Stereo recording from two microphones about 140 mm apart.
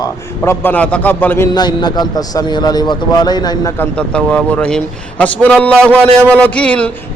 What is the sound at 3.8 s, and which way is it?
A man's voice, 10° left (ahead or behind).